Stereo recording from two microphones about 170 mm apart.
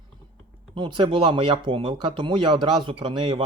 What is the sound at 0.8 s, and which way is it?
Speech, 30° right (ahead or behind).